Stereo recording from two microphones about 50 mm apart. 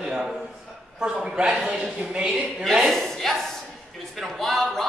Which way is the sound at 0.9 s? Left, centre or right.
Centre.